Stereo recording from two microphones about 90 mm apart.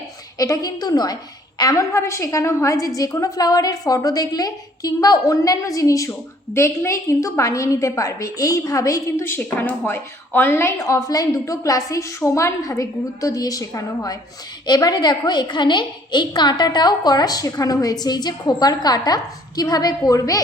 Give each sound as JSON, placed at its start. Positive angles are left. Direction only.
{"t": 0.3, "sound": "a woman's voice", "side_deg": 40}